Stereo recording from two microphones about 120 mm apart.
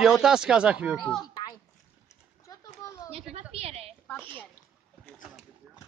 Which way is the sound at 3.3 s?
55° right (ahead or behind).